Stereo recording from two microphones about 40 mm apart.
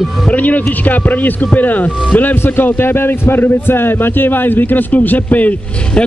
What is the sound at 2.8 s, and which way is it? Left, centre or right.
A man's voice, left.